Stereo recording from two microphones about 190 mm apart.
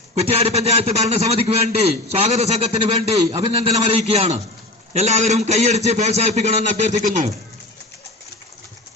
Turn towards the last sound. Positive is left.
turn(degrees=-40)  # may be behind; listen again after turning